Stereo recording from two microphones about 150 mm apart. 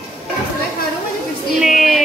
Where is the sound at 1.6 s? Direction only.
Centre (ahead or behind).